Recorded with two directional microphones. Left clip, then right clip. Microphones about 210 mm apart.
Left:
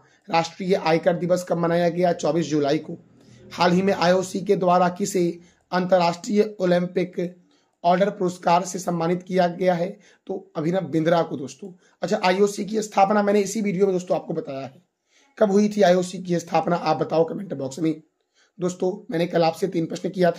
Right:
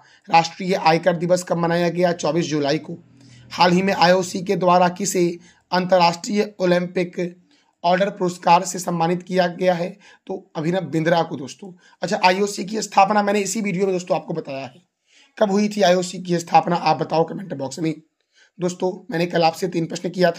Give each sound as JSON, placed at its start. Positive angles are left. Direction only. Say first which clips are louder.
{"t": 0.3, "sound": "speech", "louder": "right 4 dB", "side_deg": -30}